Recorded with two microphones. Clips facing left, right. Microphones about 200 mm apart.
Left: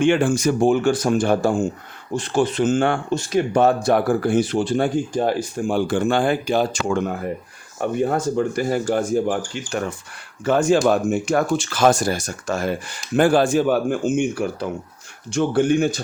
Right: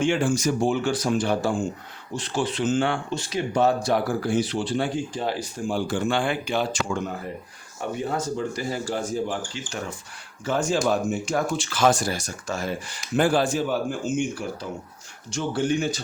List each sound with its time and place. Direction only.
0.0 s speech: 60° left (ahead or behind); by 6.7 s 40° left (ahead or behind)
6.9 s speech: 60° left (ahead or behind)
10.4 s speech: 60° left (ahead or behind)